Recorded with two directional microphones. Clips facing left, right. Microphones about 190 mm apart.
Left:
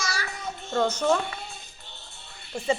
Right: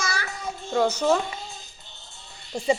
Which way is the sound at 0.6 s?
10° right (ahead or behind).